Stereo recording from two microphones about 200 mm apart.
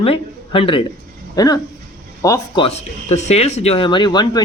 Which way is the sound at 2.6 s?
35° left (ahead or behind).